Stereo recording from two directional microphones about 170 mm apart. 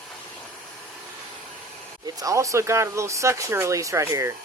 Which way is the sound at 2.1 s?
20° right (ahead or behind).